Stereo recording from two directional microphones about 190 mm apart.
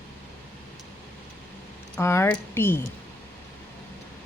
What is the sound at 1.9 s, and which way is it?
Speech, 15° left (ahead or behind).